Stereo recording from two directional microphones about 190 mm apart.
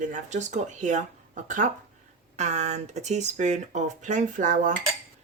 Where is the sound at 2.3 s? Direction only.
35° right (ahead or behind).